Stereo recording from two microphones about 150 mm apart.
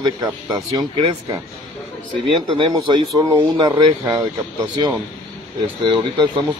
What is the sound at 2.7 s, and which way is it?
Speech, 20° right (ahead or behind).